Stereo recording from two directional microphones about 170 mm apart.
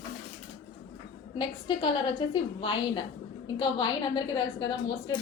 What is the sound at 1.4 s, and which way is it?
A woman's voice, 25° left (ahead or behind).